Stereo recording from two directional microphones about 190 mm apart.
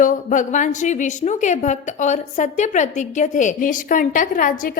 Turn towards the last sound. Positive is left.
turn(degrees=45)  # may be behind; listen again after turning